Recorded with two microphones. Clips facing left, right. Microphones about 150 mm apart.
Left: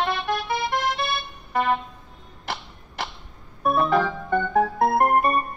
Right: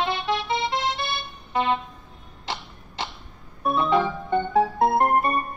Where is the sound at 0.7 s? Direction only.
20° right (ahead or behind).